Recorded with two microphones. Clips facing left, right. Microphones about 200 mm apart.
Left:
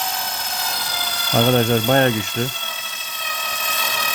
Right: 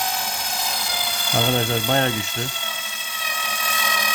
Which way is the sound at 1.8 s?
60° left (ahead or behind).